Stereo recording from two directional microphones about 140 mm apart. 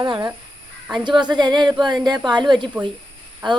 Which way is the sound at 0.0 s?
30° right (ahead or behind).